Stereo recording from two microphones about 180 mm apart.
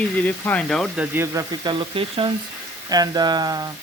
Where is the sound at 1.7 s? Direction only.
30° right (ahead or behind).